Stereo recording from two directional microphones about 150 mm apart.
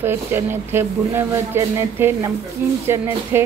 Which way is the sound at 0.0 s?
15° right (ahead or behind).